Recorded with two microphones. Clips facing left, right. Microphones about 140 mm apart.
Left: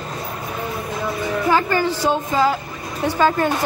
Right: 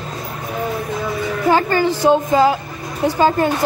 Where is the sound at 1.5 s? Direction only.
20° right (ahead or behind).